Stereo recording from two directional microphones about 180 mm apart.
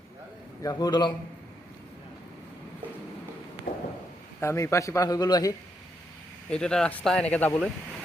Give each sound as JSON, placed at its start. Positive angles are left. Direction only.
{"t": 0.6, "sound": "a man's voice", "side_deg": 20}
{"t": 3.7, "sound": "a sound", "side_deg": 45}
{"t": 4.4, "sound": "a man's voice", "side_deg": 15}
{"t": 6.5, "sound": "speech", "side_deg": 5}